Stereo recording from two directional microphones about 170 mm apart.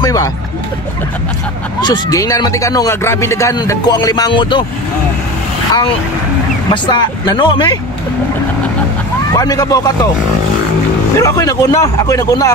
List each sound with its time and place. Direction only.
0.0 s speech: 20° left (ahead or behind)
1.8 s speech: 20° left (ahead or behind)
6.7 s speech: 25° left (ahead or behind)
9.3 s speech: 20° left (ahead or behind)
11.1 s speech: 20° left (ahead or behind)